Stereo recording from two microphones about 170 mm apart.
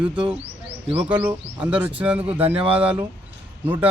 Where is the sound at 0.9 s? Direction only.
30° right (ahead or behind).